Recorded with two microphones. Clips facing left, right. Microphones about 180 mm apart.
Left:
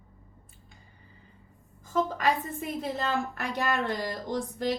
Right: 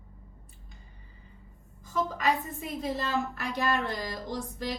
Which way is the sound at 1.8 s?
50° left (ahead or behind).